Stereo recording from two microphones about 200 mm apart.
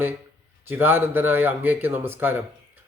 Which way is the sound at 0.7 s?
10° right (ahead or behind).